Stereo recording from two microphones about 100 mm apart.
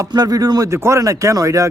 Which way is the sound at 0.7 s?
30° right (ahead or behind).